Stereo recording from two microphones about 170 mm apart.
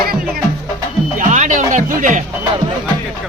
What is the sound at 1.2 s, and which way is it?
Music, 45° right (ahead or behind).